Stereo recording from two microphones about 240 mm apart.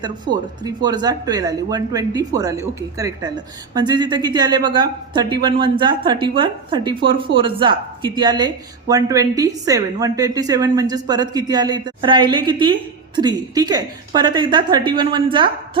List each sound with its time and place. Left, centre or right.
0.3 s speech: right
0.6 s a woman's voice: centre